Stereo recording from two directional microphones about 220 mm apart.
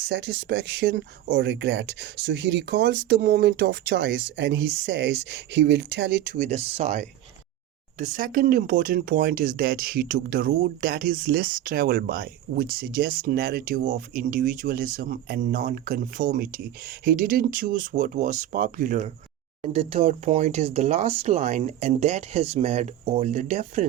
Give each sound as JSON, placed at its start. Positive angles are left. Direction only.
{"t": 0.1, "sound": "speech", "side_deg": -50}
{"t": 6.2, "sound": "speech", "side_deg": -35}
{"t": 19.6, "sound": "speech", "side_deg": -25}